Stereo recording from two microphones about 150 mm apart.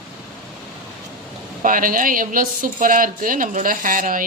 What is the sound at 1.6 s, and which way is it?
A woman's voice, 65° right (ahead or behind).